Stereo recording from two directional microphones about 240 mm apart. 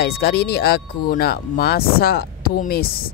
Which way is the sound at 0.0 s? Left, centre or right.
Left.